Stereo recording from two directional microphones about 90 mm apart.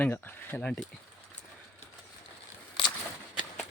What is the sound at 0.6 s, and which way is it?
Speech, 10° left (ahead or behind).